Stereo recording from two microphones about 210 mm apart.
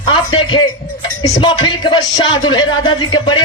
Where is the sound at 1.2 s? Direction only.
20° left (ahead or behind).